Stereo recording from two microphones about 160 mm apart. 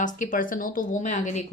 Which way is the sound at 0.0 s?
55° left (ahead or behind).